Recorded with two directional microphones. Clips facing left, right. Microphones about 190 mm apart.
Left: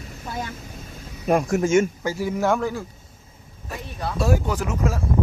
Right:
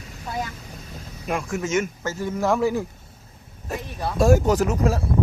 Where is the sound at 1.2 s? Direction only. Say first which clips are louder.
Left 6 dB; 40° left (ahead or behind).